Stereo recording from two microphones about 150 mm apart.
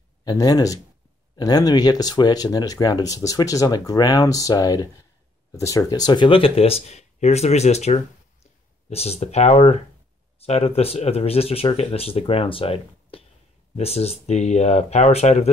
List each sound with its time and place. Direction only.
0.2 s speech: 25° left (ahead or behind); by 15.5 s 45° left (ahead or behind)